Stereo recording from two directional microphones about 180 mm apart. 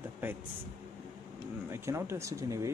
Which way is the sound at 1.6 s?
15° right (ahead or behind).